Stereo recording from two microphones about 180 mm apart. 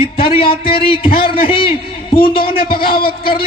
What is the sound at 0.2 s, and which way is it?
A man's voice, 30° left (ahead or behind).